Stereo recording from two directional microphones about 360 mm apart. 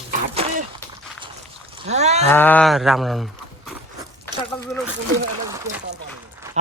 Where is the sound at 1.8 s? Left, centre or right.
Centre.